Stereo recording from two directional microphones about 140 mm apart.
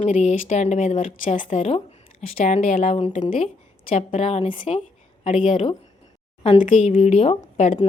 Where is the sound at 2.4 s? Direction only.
50° left (ahead or behind).